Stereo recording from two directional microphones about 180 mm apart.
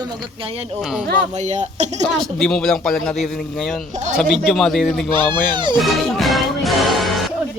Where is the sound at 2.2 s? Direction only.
5° left (ahead or behind).